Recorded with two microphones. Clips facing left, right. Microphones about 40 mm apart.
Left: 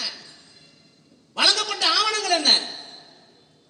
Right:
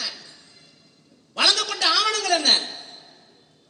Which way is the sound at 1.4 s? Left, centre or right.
Left.